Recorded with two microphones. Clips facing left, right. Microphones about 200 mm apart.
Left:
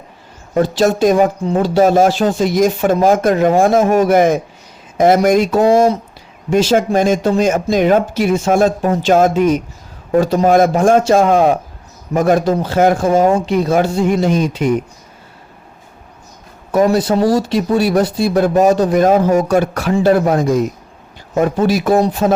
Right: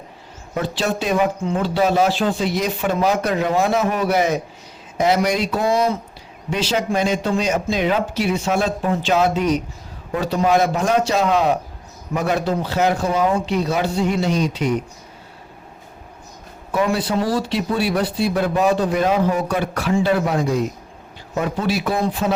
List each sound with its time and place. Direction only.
0.5 s speech: 45° left (ahead or behind)
16.7 s speech: 40° left (ahead or behind)